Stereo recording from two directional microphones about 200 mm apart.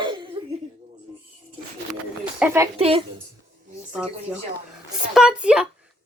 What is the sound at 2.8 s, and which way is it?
Speech, 30° right (ahead or behind).